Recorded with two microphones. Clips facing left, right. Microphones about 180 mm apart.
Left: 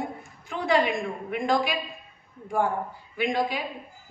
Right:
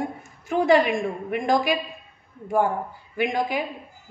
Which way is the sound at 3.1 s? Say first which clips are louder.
Right 2 dB; 45° right (ahead or behind).